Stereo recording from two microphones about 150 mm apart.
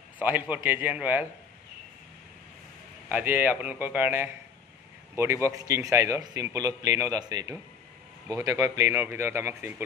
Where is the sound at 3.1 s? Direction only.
15° right (ahead or behind).